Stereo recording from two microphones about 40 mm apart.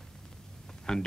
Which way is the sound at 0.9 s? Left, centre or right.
Centre.